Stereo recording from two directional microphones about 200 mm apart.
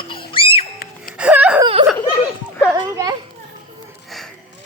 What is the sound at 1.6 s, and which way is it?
Speech, 30° right (ahead or behind).